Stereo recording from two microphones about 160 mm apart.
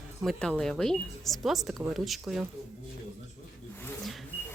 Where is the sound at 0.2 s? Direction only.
5° left (ahead or behind).